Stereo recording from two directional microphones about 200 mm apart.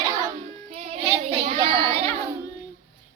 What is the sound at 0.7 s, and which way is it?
Child singing, 35° right (ahead or behind).